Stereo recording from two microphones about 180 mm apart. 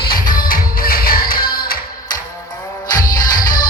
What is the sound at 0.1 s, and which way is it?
Music, 50° left (ahead or behind).